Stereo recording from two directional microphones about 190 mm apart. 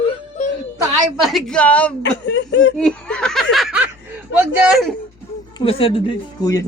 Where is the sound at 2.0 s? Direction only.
70° left (ahead or behind).